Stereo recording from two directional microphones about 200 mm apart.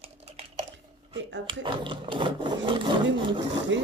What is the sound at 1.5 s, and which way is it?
Speech, 25° right (ahead or behind).